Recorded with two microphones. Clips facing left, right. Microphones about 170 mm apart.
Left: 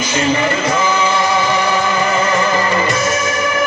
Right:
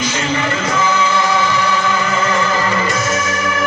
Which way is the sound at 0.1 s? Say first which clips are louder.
Left 3 dB; 25° left (ahead or behind).